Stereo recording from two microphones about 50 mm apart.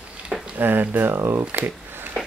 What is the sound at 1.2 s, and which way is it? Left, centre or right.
Speech, right.